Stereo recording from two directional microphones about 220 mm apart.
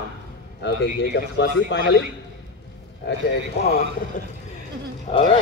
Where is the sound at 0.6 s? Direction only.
50° left (ahead or behind).